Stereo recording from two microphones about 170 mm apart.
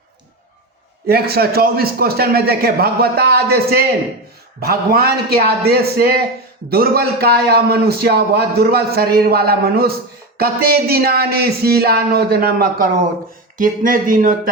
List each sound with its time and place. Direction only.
1.0 s speech: 65° right (ahead or behind)